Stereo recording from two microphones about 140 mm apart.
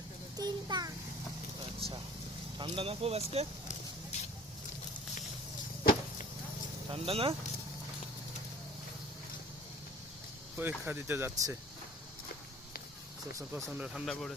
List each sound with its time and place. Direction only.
0.3 s a sound: 30° right (ahead or behind)
2.6 s speech: 40° right (ahead or behind)
5.8 s a sound: 90° left
6.9 s speech: 40° right (ahead or behind)
10.6 s speech: 15° right (ahead or behind)
13.5 s speech: 10° right (ahead or behind)